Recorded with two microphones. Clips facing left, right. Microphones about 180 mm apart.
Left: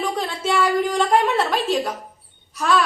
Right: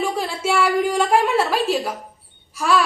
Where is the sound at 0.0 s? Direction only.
10° right (ahead or behind).